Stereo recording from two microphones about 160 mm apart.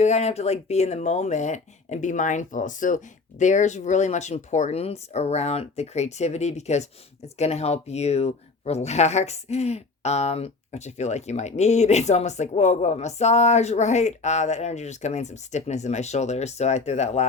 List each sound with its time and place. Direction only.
0.0 s speech: 45° left (ahead or behind)